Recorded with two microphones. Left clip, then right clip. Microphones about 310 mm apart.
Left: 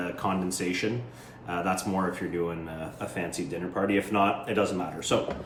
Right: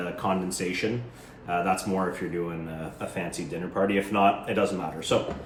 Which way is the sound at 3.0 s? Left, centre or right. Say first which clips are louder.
Even; centre.